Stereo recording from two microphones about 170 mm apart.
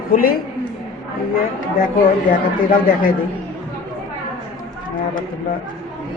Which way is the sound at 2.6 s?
55° left (ahead or behind).